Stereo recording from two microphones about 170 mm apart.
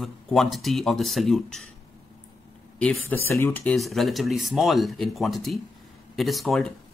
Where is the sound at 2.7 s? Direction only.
5° left (ahead or behind).